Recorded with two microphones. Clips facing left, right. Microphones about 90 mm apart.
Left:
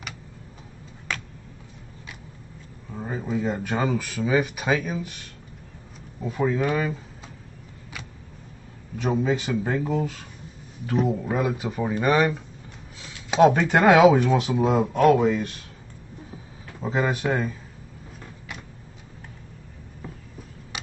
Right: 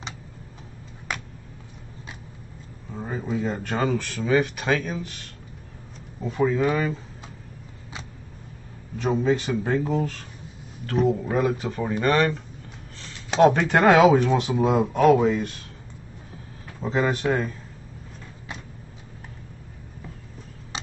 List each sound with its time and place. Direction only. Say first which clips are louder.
2.9 s speech: even; 5° left (ahead or behind)
8.9 s speech: right 1 dB; 5° left (ahead or behind)
16.8 s speech: right 1 dB; 5° left (ahead or behind)
20.7 s a sound: right 2 dB; 25° right (ahead or behind)